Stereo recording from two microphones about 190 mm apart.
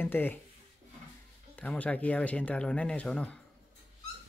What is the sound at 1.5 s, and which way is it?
Speech, 10° left (ahead or behind).